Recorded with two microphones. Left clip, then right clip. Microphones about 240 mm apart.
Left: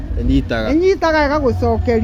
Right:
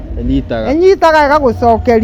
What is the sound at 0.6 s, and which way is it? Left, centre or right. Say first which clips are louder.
A woman's voice: right 7 dB; right.